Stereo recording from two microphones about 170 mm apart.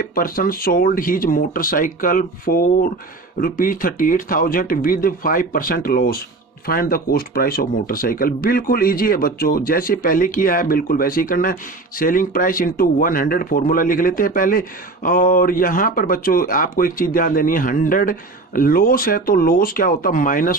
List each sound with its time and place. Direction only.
0.0 s speech: 55° left (ahead or behind)